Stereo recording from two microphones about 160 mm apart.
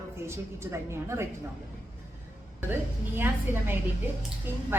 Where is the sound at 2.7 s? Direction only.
15° right (ahead or behind).